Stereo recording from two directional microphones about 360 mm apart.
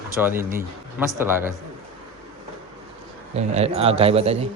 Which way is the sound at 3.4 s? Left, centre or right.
Centre.